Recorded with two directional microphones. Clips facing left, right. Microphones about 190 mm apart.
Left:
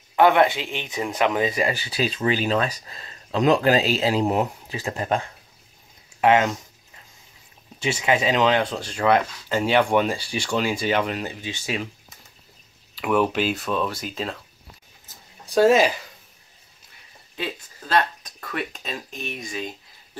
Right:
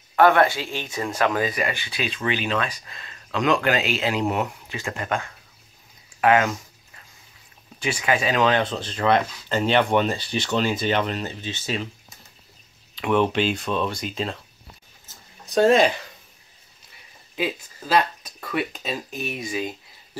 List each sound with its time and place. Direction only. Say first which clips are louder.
0.1 s speech: even; 15° left (ahead or behind); by 5.3 s 35° left (ahead or behind)
6.2 s speech: left 1 dB; 25° left (ahead or behind)
7.8 s speech: left 2 dB; 25° left (ahead or behind)
12.9 s speech: right 1 dB; 5° left (ahead or behind)
15.5 s speech: even; 5° left (ahead or behind)
17.4 s speech: right 4 dB; 10° right (ahead or behind)